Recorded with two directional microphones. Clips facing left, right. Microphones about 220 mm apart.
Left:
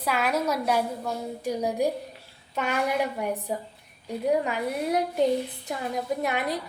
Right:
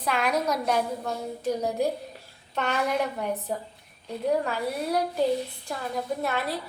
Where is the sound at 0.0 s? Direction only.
5° left (ahead or behind).